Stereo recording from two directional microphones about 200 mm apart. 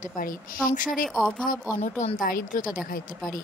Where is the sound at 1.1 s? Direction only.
Centre (ahead or behind).